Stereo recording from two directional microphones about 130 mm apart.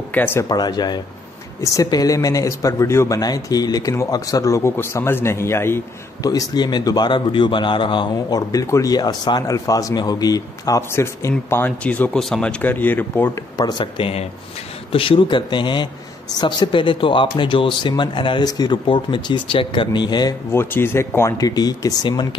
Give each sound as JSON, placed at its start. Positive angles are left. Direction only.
{"t": 0.1, "sound": "speech", "side_deg": 15}
{"t": 0.5, "sound": "speech", "side_deg": 30}
{"t": 13.6, "sound": "speech", "side_deg": 35}
{"t": 20.5, "sound": "speech", "side_deg": 20}